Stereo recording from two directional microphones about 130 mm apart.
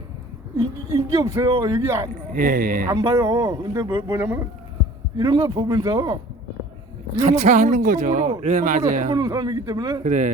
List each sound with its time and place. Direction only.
0.9 s speech: 25° right (ahead or behind)
2.3 s speech: 90° right
2.8 s speech: 25° right (ahead or behind)
5.1 s speech: 30° right (ahead or behind)
7.2 s speech: 65° right (ahead or behind)
9.1 s speech: 30° right (ahead or behind)
10.0 s speech: 70° right (ahead or behind)